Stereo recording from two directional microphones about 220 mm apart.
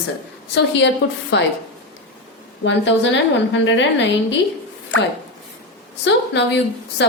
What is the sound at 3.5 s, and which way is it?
Speech, 55° left (ahead or behind).